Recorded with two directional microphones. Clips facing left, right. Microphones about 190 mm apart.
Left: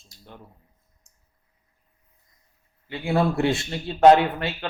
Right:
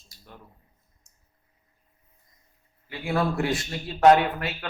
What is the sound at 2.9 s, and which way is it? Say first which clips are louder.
Speech: left 3 dB; 25° left (ahead or behind).